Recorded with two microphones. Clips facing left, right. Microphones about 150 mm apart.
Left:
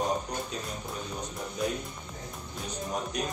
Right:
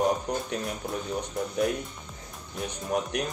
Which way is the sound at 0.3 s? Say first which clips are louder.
Right 5 dB; 60° right (ahead or behind).